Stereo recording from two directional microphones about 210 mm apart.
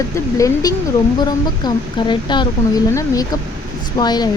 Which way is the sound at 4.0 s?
20° left (ahead or behind).